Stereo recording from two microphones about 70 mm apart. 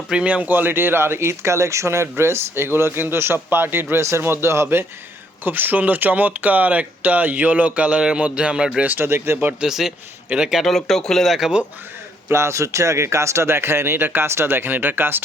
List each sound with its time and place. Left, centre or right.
0.1 s speech: centre
8.8 s speech: right
9.6 s a man's voice: centre
10.6 s speech: centre
12.3 s speech: right